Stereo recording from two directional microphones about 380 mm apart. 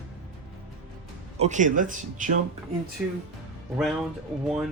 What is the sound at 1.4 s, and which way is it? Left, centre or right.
Speech, centre.